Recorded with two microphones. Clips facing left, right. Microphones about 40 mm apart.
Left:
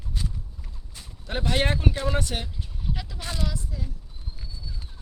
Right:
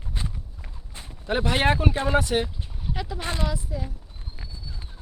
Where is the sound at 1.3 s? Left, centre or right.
Centre.